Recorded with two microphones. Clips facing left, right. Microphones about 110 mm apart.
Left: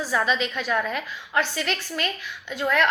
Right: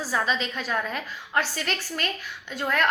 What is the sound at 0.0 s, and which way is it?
A woman's voice, 40° right (ahead or behind).